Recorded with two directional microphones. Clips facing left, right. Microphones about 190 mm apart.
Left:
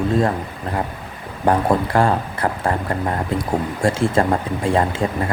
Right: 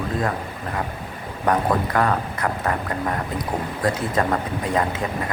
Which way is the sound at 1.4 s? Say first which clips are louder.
Left 3 dB; 30° left (ahead or behind).